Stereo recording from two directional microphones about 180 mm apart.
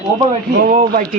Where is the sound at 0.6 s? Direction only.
50° right (ahead or behind).